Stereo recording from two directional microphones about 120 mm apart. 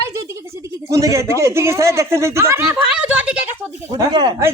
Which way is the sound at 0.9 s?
25° right (ahead or behind).